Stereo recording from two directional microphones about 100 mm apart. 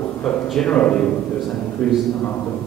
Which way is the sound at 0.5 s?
10° left (ahead or behind).